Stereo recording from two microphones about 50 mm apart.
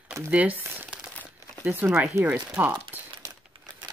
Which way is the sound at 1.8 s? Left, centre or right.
Right.